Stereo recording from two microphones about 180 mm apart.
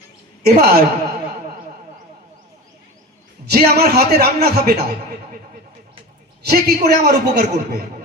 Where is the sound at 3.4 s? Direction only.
60° right (ahead or behind).